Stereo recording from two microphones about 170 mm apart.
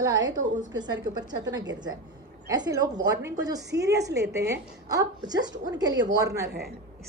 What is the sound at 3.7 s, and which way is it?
Speech, 80° right.